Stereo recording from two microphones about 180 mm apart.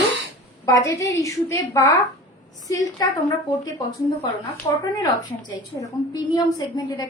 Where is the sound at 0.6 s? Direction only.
15° left (ahead or behind).